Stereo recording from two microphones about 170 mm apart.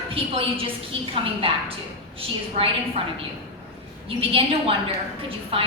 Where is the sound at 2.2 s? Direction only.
35° right (ahead or behind).